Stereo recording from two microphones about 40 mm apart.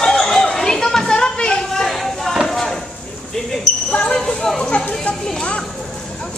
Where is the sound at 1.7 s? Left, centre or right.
Centre.